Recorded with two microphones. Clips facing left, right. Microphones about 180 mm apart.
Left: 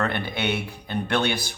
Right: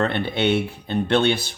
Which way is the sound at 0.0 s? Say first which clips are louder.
Right 5 dB; 25° right (ahead or behind).